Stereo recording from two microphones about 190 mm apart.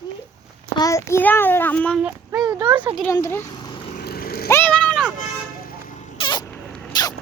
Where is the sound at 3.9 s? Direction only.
50° left (ahead or behind).